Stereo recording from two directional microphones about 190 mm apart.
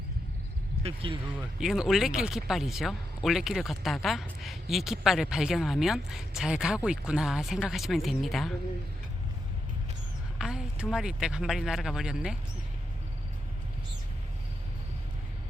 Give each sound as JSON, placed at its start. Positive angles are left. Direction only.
{"t": 0.8, "sound": "speech", "side_deg": -30}
{"t": 1.3, "sound": "speech", "side_deg": -5}
{"t": 10.3, "sound": "speech", "side_deg": -5}